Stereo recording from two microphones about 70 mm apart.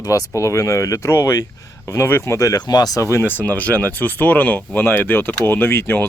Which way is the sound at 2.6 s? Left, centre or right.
Left.